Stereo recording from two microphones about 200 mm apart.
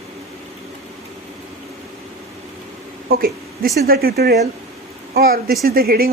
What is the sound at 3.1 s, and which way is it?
A woman's voice, 45° right (ahead or behind).